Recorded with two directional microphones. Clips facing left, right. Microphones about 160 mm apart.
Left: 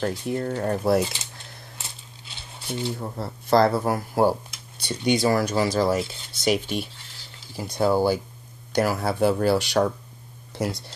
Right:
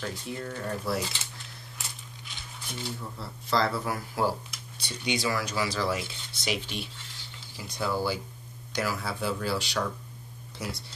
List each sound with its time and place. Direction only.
0.0 s speech: 45° left (ahead or behind)
1.8 s a sound: 30° left (ahead or behind)
3.0 s speech: 50° left (ahead or behind)